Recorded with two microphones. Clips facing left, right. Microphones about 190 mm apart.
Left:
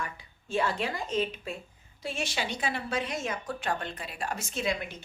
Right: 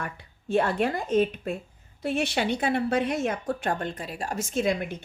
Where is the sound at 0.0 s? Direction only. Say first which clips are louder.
Right 2 dB; 60° right (ahead or behind).